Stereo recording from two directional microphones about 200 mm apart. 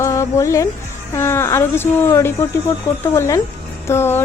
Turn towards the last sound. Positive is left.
turn(degrees=10)  # may be behind; listen again after turning